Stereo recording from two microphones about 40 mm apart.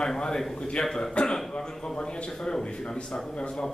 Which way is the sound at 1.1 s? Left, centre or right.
Left.